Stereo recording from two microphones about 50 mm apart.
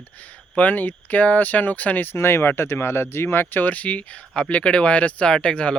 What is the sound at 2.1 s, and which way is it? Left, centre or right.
Speech, left.